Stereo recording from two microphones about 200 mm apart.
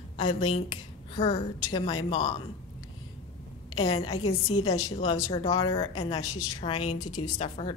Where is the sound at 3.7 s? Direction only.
20° left (ahead or behind).